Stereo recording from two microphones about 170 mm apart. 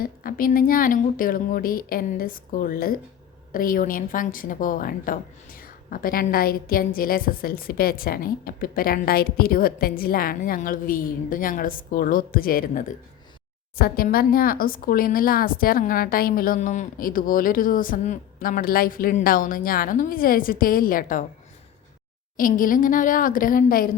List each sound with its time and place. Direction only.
0.0 s speech: 55° left (ahead or behind)
22.4 s a woman's voice: 55° left (ahead or behind)